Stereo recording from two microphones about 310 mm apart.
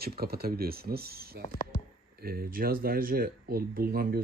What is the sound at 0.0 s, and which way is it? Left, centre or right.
Speech, right.